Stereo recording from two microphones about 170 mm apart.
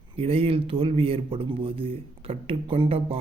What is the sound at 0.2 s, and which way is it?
A man's voice, 35° right (ahead or behind).